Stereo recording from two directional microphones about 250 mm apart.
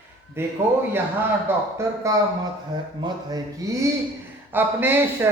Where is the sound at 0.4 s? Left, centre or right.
Centre.